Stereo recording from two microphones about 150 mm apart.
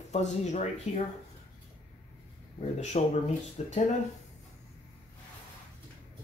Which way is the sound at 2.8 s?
50° left (ahead or behind).